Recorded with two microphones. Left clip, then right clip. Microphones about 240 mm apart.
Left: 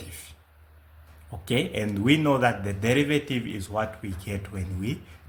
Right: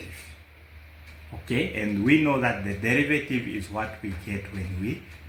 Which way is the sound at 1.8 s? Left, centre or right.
Left.